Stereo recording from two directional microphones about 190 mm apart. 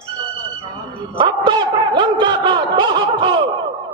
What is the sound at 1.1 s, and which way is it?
A man's voice, 25° right (ahead or behind).